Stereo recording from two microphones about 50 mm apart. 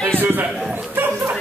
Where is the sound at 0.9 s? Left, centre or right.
Right.